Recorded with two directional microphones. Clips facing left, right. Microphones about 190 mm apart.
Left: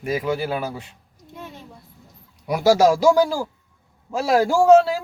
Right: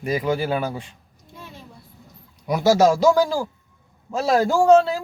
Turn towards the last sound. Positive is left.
turn(degrees=10)  # may be behind; listen again after turning